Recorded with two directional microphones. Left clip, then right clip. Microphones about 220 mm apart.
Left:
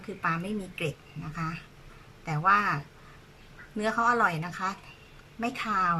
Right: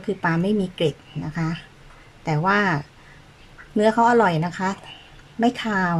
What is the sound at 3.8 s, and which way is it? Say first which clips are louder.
Speech: right 8 dB; 30° right (ahead or behind).